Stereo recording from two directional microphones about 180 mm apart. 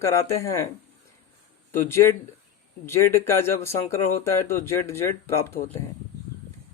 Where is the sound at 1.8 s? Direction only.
15° left (ahead or behind).